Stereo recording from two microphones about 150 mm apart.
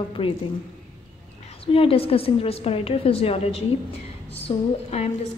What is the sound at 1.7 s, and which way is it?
A woman's voice, 40° left (ahead or behind).